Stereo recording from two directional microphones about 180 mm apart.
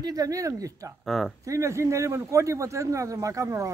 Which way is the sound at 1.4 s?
15° right (ahead or behind).